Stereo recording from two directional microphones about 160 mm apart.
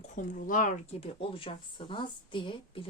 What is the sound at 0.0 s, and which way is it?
Speech, 55° left (ahead or behind).